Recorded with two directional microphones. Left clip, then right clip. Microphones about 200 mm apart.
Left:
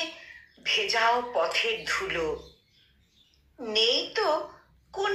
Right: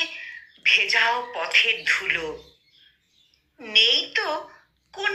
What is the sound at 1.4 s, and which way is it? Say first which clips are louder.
Speech: right 7 dB; 5° left (ahead or behind).